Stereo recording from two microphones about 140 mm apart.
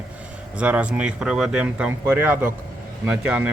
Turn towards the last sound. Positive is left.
turn(degrees=-10)  # may be behind; listen again after turning